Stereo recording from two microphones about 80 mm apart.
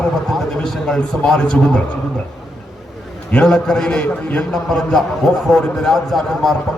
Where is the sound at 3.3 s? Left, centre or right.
Centre.